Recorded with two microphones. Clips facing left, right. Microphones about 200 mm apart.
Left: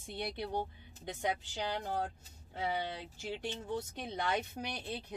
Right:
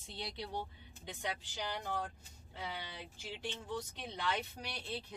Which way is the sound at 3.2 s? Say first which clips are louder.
Left 5 dB; 50° left (ahead or behind).